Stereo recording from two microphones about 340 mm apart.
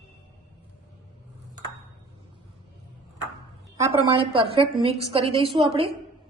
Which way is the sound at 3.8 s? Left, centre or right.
Centre.